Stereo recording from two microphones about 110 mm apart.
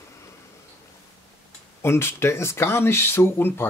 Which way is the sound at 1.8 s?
25° left (ahead or behind).